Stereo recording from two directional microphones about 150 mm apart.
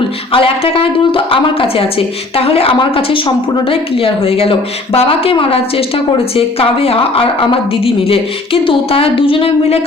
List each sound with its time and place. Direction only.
0.3 s a woman's voice: 35° left (ahead or behind)